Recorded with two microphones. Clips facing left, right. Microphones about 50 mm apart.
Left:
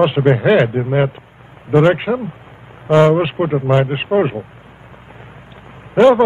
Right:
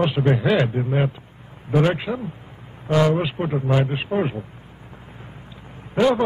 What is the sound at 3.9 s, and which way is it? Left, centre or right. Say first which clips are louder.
Speech: left 7 dB; left.